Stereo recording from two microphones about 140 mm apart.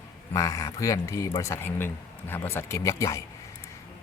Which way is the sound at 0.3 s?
20° left (ahead or behind).